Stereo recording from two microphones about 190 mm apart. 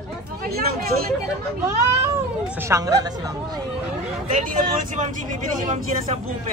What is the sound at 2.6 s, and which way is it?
Speech, 15° right (ahead or behind).